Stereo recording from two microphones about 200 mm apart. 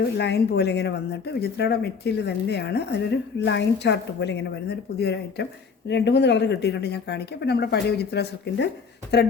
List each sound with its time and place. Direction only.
0.2 s speech: 55° left (ahead or behind)